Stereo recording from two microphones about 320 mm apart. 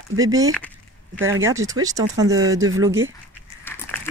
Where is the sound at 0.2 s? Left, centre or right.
Centre.